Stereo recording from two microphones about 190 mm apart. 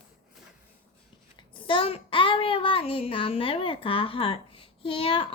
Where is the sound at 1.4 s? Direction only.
25° left (ahead or behind).